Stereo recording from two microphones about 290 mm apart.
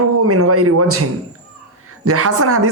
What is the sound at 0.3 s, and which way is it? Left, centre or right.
Speech, right.